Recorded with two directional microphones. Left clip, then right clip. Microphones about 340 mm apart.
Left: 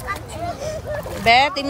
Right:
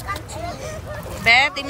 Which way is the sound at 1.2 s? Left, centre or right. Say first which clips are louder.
Left 1 dB; centre.